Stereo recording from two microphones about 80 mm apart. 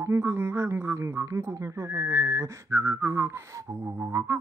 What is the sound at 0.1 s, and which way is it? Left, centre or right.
Music, right.